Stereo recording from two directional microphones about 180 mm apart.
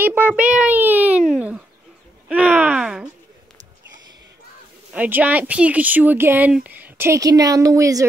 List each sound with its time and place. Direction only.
0.0 s child singing: 10° right (ahead or behind)
1.3 s a sound: 5° right (ahead or behind)
2.2 s wail: 5° right (ahead or behind)
4.9 s speech: 10° right (ahead or behind)